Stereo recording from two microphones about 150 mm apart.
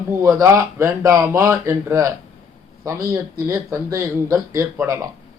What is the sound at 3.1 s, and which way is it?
A man's voice, 20° right (ahead or behind).